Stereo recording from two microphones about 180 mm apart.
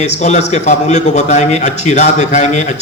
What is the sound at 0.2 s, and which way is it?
A man's voice, 40° left (ahead or behind).